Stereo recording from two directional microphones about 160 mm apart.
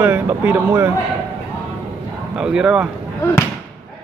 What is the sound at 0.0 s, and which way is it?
Speech, 10° right (ahead or behind).